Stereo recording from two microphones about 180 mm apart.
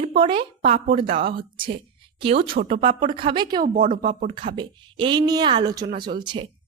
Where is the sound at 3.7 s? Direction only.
50° right (ahead or behind).